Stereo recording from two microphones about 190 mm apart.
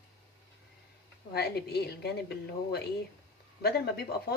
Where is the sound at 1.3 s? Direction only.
55° left (ahead or behind).